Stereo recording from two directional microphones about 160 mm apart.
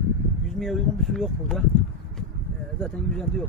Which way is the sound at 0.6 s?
Centre (ahead or behind).